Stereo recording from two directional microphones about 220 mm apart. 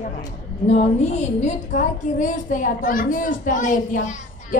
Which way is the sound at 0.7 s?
30° left (ahead or behind).